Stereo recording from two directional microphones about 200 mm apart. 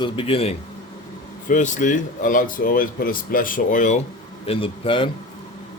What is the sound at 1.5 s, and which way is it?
Speech, 40° left (ahead or behind).